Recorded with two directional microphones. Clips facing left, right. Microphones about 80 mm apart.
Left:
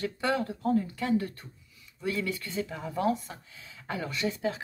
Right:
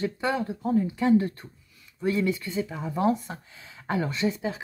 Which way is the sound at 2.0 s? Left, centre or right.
Right.